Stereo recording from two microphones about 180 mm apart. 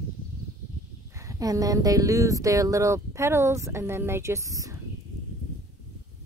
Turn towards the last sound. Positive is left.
turn(degrees=-20)  # may be behind; listen again after turning